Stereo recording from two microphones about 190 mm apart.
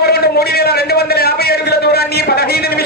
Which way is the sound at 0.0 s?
55° left (ahead or behind).